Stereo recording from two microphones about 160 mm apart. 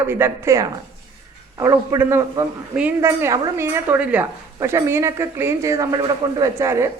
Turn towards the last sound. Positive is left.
turn(degrees=-15)  # may be behind; listen again after turning